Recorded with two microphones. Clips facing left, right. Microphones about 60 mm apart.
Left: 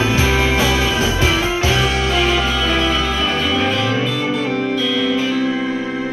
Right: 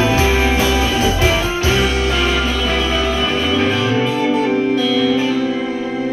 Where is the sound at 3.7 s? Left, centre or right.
Right.